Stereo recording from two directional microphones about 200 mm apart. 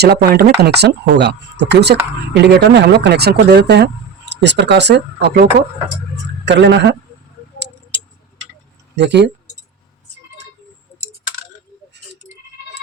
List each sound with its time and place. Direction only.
0.0 s speech: 55° right (ahead or behind)
9.0 s speech: 60° right (ahead or behind)